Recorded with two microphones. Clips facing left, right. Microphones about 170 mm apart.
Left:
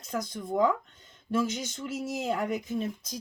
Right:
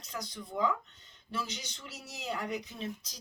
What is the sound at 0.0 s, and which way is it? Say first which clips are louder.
Speech: left 8 dB; 50° left (ahead or behind).